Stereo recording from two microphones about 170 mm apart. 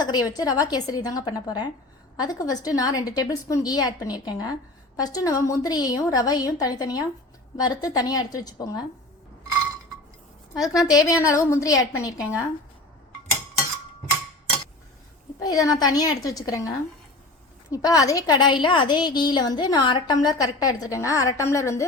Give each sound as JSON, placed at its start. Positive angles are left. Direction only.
{"t": 0.0, "sound": "a sound", "side_deg": 25}
{"t": 0.3, "sound": "a woman's voice", "side_deg": 20}
{"t": 10.5, "sound": "a woman's voice", "side_deg": 20}
{"t": 15.4, "sound": "a woman's voice", "side_deg": 20}